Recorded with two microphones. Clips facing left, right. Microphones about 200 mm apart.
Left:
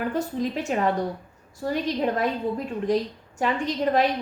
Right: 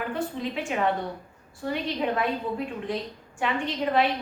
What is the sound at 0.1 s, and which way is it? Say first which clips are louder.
A woman's voice: left 4 dB; 40° left (ahead or behind).